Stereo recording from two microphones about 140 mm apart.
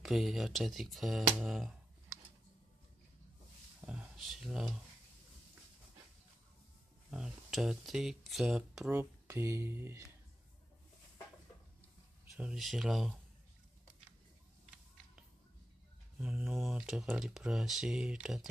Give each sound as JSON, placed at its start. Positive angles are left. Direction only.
{"t": 0.0, "sound": "speech", "side_deg": 0}
{"t": 3.8, "sound": "speech", "side_deg": -10}
{"t": 7.1, "sound": "speech", "side_deg": -5}
{"t": 8.9, "sound": "speech", "side_deg": -20}
{"t": 12.4, "sound": "speech", "side_deg": -5}
{"t": 16.2, "sound": "speech", "side_deg": -5}